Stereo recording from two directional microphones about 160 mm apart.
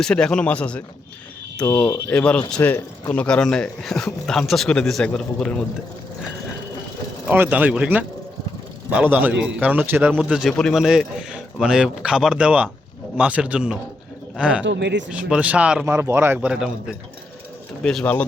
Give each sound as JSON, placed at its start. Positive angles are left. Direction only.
{"t": 0.0, "sound": "speech", "side_deg": 5}
{"t": 7.3, "sound": "speech", "side_deg": -10}
{"t": 14.7, "sound": "speech", "side_deg": -90}
{"t": 15.1, "sound": "speech", "side_deg": -10}
{"t": 17.8, "sound": "speech", "side_deg": 10}